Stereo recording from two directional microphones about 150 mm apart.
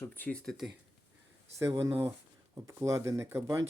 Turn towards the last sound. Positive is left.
turn(degrees=-20)  # may be behind; listen again after turning